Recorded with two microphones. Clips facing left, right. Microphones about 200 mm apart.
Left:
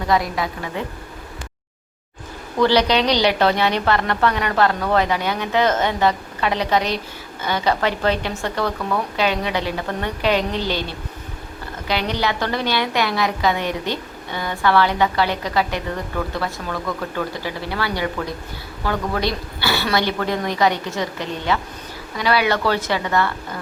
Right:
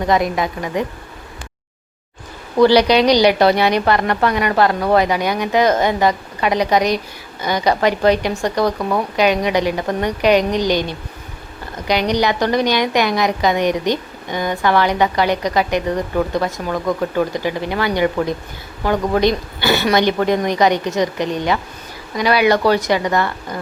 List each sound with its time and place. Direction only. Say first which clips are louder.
0.1 s a woman's voice: right 3 dB; 20° right (ahead or behind)
2.6 s a woman's voice: right 5 dB; 10° right (ahead or behind)